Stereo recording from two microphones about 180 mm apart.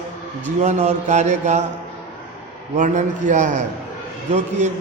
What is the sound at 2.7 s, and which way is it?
A man's voice, 45° right (ahead or behind).